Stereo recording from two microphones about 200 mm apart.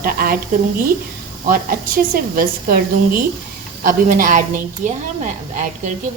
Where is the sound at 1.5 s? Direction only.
45° right (ahead or behind).